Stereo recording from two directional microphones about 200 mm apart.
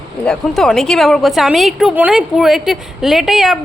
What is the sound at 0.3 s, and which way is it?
A woman's voice, centre (ahead or behind).